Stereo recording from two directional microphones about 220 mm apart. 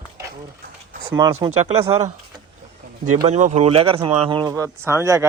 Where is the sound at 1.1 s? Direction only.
15° right (ahead or behind).